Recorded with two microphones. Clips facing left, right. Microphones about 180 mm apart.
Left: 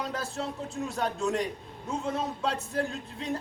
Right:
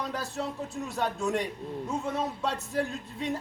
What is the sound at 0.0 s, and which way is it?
Speech, centre (ahead or behind).